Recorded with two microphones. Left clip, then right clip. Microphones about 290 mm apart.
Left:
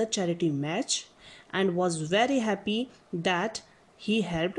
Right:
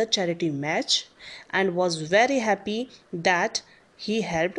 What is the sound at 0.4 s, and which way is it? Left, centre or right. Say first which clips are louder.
Speech: right 3 dB; centre.